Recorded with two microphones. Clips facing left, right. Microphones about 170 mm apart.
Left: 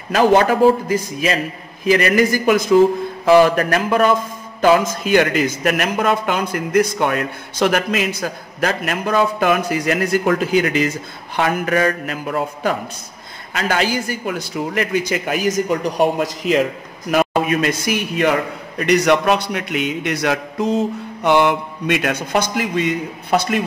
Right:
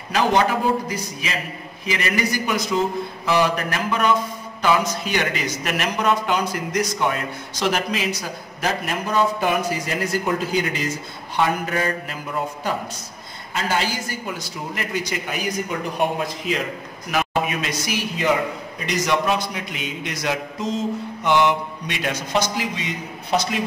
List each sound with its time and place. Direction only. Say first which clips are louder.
0.1 s a man's voice: left 6 dB; 50° left (ahead or behind)
9.4 s a man's voice: left 5 dB; 75° left (ahead or behind)
15.5 s speech: left 7 dB; 40° left (ahead or behind)
17.1 s a man's voice: left 6 dB; 50° left (ahead or behind)